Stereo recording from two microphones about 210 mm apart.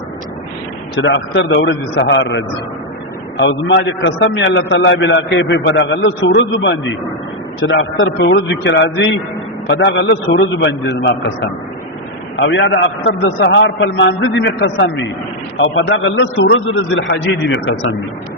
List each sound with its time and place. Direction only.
0.9 s a man's voice: 60° left (ahead or behind)